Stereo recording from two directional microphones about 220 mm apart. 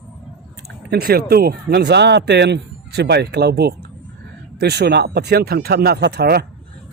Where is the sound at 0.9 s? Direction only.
45° right (ahead or behind).